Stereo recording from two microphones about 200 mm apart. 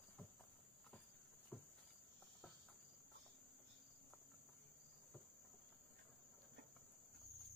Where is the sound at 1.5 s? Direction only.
5° left (ahead or behind).